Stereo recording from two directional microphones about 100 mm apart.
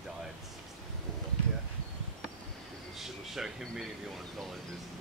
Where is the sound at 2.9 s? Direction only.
5° right (ahead or behind).